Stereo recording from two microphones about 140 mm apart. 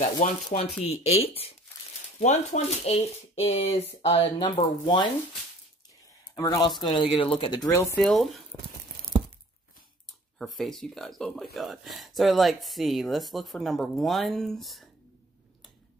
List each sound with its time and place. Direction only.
0.2 s speech: 75° left (ahead or behind)
0.8 s speech: 45° left (ahead or behind)
2.1 s speech: 55° left (ahead or behind); by 5.1 s 35° left (ahead or behind)
6.3 s speech: 25° left (ahead or behind)
8.0 s speech: centre (ahead or behind)
10.4 s speech: centre (ahead or behind)